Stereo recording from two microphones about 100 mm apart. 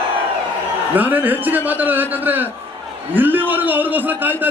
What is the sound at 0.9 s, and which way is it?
A man's voice, 15° right (ahead or behind).